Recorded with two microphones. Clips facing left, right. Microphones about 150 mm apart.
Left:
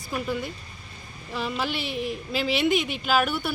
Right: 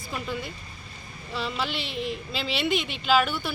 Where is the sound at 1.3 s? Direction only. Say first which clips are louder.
Left 2 dB; 10° left (ahead or behind).